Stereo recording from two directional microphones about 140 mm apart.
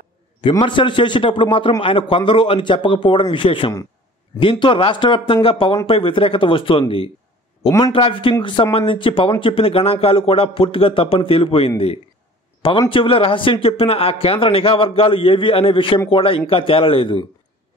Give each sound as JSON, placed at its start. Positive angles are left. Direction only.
{"t": 0.4, "sound": "a man's voice", "side_deg": 35}
{"t": 12.9, "sound": "a man's voice", "side_deg": 40}